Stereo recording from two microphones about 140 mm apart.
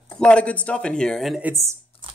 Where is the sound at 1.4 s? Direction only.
20° right (ahead or behind).